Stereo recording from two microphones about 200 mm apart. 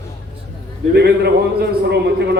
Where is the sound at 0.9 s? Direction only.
55° right (ahead or behind).